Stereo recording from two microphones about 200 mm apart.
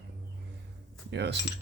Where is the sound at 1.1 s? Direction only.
60° right (ahead or behind).